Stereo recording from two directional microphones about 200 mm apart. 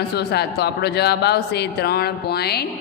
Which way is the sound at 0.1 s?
55° left (ahead or behind).